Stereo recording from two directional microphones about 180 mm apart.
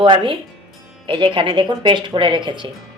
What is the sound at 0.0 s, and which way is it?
Speech, 30° right (ahead or behind).